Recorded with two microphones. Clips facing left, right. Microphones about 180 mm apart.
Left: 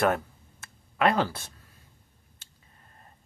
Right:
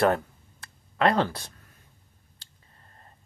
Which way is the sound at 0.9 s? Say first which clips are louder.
Right 1 dB; 10° left (ahead or behind).